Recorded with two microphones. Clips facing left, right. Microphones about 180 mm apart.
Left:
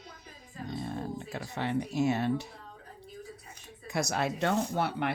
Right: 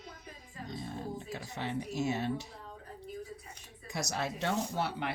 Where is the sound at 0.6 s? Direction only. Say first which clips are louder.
Left 4 dB; 60° left (ahead or behind).